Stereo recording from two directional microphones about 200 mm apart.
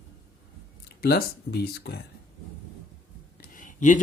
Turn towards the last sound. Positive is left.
turn(degrees=40)  # may be behind; listen again after turning